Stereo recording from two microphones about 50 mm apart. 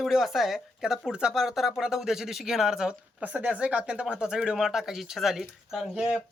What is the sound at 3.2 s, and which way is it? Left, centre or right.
Speech, right.